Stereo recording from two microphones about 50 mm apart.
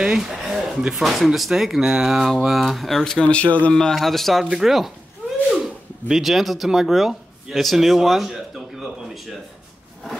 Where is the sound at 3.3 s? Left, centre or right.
Left.